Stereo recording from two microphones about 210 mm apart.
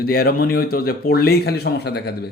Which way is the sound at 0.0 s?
45° left (ahead or behind).